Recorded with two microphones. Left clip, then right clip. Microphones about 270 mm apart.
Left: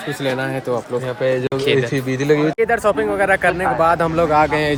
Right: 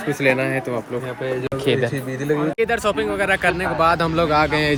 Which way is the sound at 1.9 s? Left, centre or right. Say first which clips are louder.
Left 6 dB; left.